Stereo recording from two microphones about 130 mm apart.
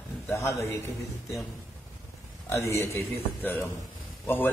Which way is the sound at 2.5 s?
20° left (ahead or behind).